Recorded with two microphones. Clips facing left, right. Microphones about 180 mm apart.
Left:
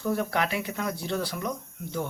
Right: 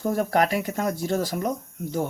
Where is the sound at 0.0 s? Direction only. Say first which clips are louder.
Right 5 dB; 45° right (ahead or behind).